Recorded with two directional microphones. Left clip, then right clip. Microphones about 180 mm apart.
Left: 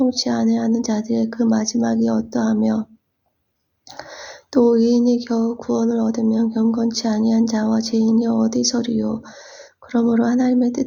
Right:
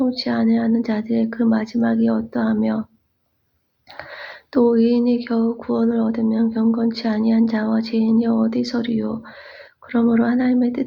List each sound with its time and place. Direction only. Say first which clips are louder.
0.0 s speech: left 1 dB; 50° left (ahead or behind)
3.9 s speech: right 1 dB; 45° left (ahead or behind)